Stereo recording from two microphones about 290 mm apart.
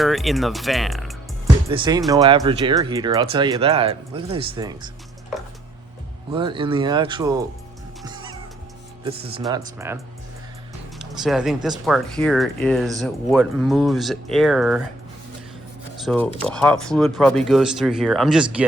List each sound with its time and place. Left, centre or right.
0.0 s speech: centre
1.7 s speech: centre
6.3 s speech: centre
8.0 s music: centre
9.5 s speech: centre
16.0 s speech: centre